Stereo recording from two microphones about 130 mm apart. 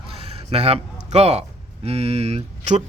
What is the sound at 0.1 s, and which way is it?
A man's voice, 50° right (ahead or behind).